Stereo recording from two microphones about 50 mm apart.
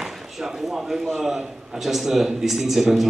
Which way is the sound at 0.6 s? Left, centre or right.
Centre.